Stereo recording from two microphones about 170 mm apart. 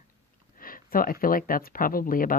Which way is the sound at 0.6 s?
55° left (ahead or behind).